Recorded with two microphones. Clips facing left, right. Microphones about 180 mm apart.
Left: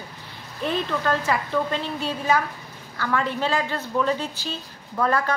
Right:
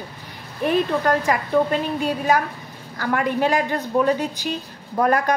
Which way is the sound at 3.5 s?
15° right (ahead or behind).